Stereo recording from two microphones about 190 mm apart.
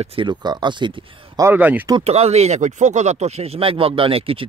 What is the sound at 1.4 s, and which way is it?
Speech, 10° right (ahead or behind).